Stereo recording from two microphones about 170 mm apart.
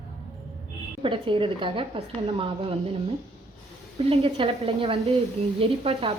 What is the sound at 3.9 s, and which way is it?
Speech, 35° right (ahead or behind).